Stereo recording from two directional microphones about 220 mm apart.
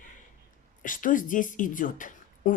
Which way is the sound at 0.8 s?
35° left (ahead or behind).